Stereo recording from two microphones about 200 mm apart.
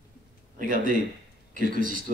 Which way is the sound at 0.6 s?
45° right (ahead or behind).